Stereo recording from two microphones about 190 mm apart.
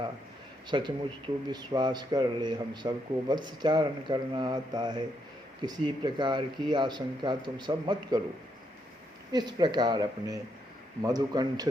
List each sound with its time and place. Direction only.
0.7 s a man's voice: 25° right (ahead or behind)
9.3 s a man's voice: 20° right (ahead or behind)